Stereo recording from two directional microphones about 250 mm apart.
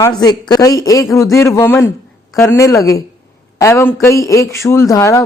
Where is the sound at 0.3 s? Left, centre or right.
Centre.